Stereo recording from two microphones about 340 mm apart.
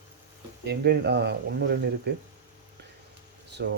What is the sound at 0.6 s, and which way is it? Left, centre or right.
Speech, right.